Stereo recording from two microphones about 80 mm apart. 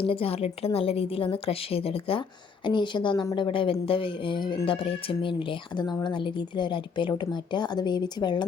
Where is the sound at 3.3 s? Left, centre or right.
Left.